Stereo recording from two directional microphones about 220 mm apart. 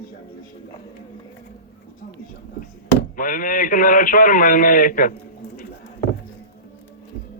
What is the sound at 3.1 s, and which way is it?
Speech, 40° left (ahead or behind).